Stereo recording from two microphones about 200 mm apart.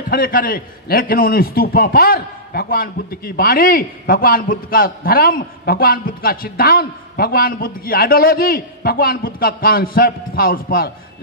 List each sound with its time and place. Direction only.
0.1 s a man's voice: 45° left (ahead or behind)